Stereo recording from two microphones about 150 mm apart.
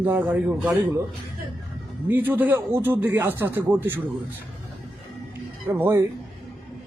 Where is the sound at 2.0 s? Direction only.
15° right (ahead or behind).